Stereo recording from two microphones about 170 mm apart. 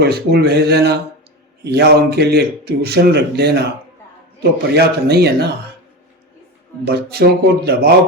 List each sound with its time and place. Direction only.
0.0 s a man's voice: 70° right (ahead or behind)
4.7 s a man's voice: 70° right (ahead or behind)
6.8 s a man's voice: 70° right (ahead or behind)